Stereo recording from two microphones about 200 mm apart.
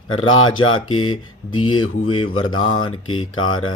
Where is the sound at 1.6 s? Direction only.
90° left.